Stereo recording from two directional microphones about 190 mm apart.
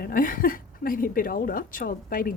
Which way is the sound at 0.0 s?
45° left (ahead or behind).